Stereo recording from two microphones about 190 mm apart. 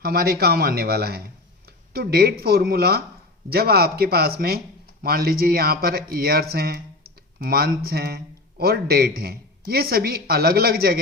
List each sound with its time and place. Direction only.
0.0 s a man's voice: 55° right (ahead or behind)